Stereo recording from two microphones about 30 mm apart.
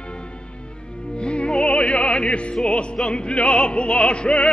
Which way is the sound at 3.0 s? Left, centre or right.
Left.